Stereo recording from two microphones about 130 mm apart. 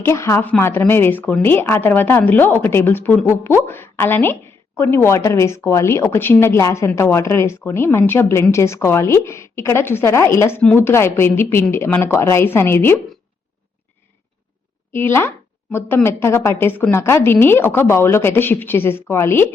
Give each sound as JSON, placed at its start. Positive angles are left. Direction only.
{"t": 0.0, "sound": "a woman's voice", "side_deg": 20}
{"t": 14.9, "sound": "a woman's voice", "side_deg": 20}